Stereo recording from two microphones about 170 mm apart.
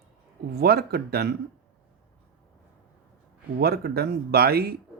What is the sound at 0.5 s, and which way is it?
Speech, 65° right (ahead or behind).